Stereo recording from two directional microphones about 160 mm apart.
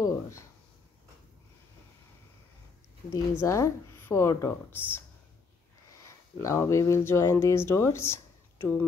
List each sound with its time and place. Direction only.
0.0 s speech: 20° left (ahead or behind)
3.1 s speech: 20° left (ahead or behind)
6.0 s speech: 20° left (ahead or behind)